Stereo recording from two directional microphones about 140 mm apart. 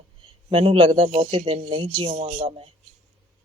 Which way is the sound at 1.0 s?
55° right (ahead or behind).